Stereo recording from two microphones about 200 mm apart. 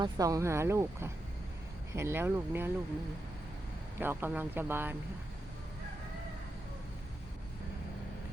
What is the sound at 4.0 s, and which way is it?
Speech, 10° right (ahead or behind).